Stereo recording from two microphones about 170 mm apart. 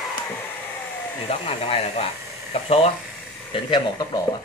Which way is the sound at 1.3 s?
35° left (ahead or behind).